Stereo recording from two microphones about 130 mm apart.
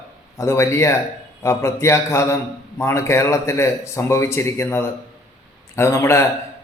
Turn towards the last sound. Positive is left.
turn(degrees=20)  # may be behind; listen again after turning